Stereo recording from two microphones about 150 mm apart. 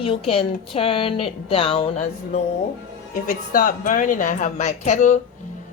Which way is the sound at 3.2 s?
65° left (ahead or behind).